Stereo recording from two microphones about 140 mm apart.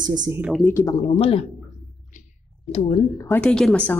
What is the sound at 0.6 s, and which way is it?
Speech, 20° left (ahead or behind).